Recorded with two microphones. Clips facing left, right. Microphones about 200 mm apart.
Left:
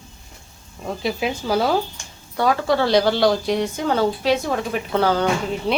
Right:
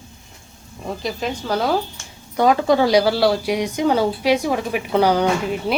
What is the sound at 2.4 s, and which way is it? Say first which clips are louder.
A woman's voice: right 3 dB; 20° right (ahead or behind).